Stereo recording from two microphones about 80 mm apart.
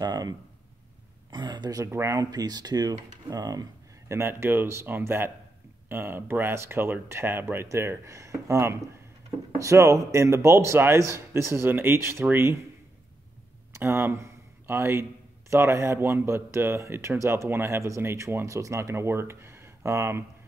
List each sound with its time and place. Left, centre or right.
0.0 s speech: right
1.3 s speech: right
1.9 s speech: right
2.3 s speech: right
4.1 s speech: right
13.7 s speech: right